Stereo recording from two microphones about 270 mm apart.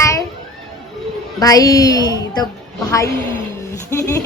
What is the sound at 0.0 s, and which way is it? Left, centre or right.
Music, centre.